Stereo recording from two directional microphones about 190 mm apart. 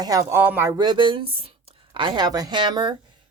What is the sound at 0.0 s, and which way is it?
Speech, 20° right (ahead or behind).